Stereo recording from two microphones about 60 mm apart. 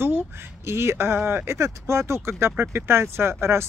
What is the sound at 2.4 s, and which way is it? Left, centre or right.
Speech, right.